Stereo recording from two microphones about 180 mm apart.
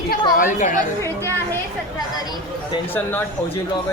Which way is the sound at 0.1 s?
50° left (ahead or behind).